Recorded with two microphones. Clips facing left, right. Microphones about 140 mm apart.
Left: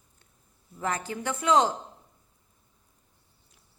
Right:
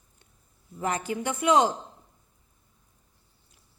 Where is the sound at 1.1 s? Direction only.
15° right (ahead or behind).